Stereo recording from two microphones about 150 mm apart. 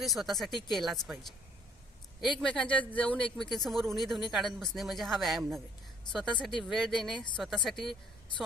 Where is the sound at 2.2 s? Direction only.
5° left (ahead or behind).